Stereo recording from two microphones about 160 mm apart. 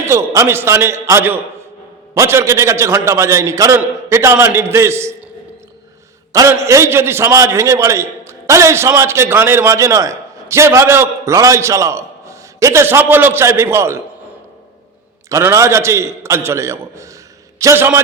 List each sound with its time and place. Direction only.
0.0 s a man's voice: 20° right (ahead or behind)
6.3 s a man's voice: 20° right (ahead or behind)
15.3 s a man's voice: 20° right (ahead or behind)